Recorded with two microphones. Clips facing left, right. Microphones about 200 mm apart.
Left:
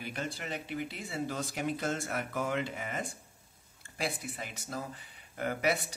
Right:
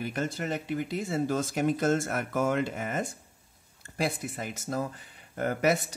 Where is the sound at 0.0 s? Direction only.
45° right (ahead or behind).